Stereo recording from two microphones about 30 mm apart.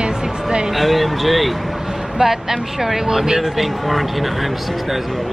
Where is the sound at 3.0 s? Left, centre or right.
Right.